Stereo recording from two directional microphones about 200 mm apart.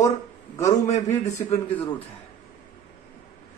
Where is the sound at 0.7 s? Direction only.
35° left (ahead or behind).